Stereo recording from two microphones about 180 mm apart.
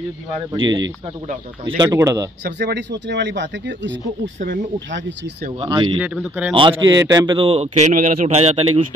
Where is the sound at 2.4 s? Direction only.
70° right (ahead or behind); by 5.3 s 85° right.